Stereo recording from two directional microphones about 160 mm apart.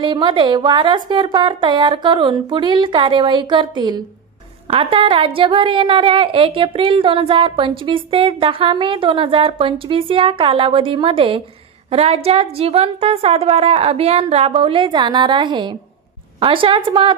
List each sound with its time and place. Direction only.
0.0 s a woman's voice: 30° right (ahead or behind)